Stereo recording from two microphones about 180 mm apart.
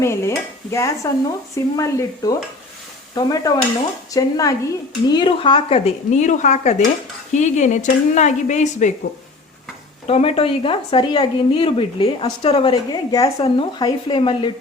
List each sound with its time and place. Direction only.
0.0 s stir: 15° left (ahead or behind)
3.2 s a woman's voice: 20° left (ahead or behind); by 8.9 s 40° left (ahead or behind)
10.1 s a woman's voice: 35° left (ahead or behind)